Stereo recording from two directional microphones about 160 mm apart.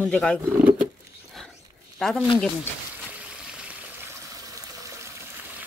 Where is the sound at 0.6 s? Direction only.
5° right (ahead or behind).